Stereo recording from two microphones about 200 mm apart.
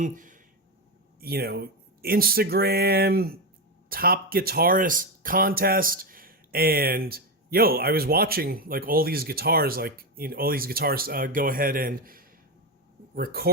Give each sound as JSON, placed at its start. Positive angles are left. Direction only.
{"t": 0.0, "sound": "speech", "side_deg": -40}
{"t": 1.2, "sound": "speech", "side_deg": -50}